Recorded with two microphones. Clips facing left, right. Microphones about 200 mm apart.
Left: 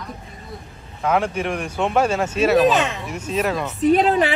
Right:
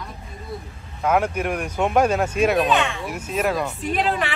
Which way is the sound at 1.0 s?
10° right (ahead or behind).